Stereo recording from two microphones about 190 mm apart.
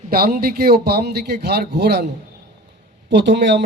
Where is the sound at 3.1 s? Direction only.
65° right (ahead or behind).